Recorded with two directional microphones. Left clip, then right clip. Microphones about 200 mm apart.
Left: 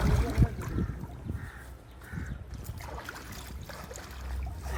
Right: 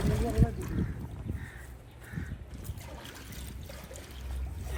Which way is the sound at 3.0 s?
Centre (ahead or behind).